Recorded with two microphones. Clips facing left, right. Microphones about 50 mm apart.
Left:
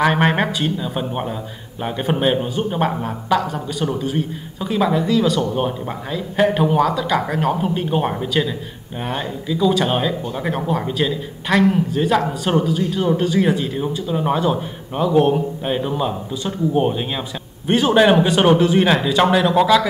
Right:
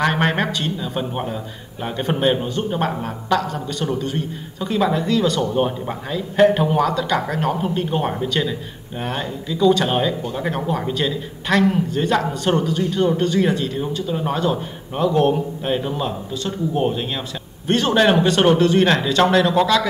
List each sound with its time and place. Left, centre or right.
0.0 s a man's voice: centre